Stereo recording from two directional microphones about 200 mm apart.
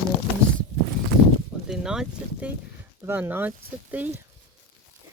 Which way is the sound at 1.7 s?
5° right (ahead or behind).